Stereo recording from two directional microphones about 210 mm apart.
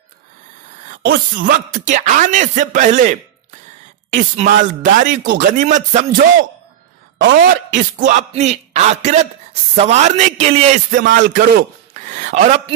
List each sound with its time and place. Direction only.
1.0 s speech: 45° right (ahead or behind)
7.3 s a woman's voice: 40° right (ahead or behind)